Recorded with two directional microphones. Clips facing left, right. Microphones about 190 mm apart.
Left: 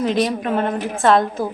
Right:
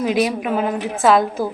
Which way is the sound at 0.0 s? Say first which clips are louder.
Even; 5° right (ahead or behind).